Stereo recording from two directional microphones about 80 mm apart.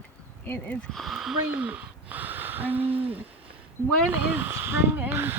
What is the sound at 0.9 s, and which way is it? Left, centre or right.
Speech, centre.